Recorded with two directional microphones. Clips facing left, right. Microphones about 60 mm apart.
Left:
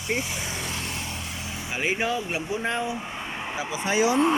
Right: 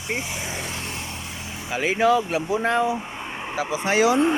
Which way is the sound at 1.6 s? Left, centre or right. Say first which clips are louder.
Right 7 dB; right.